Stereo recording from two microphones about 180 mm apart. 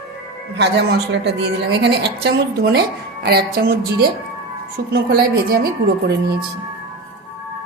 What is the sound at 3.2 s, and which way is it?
Music, 60° right (ahead or behind).